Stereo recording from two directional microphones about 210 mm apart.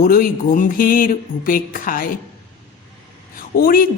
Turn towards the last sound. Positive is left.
turn(degrees=45)  # may be behind; listen again after turning